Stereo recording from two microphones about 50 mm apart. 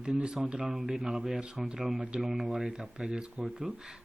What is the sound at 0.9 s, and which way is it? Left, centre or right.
Speech, centre.